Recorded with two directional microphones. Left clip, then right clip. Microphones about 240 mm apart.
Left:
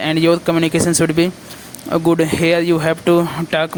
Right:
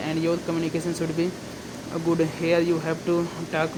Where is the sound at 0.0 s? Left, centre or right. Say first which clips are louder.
Left 11 dB; left.